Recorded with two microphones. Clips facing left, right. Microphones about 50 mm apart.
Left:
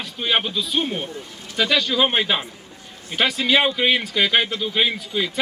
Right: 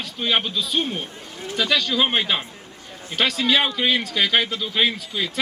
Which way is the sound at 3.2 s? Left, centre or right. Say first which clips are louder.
Left 1 dB; centre.